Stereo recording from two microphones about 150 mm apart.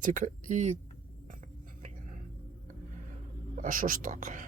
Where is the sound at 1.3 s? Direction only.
60° right (ahead or behind).